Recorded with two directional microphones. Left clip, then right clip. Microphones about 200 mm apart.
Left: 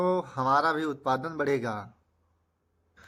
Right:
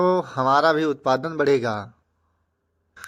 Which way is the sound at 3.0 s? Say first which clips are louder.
Right 14 dB; 30° right (ahead or behind).